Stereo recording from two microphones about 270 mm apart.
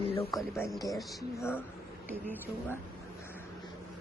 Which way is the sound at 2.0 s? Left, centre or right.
Centre.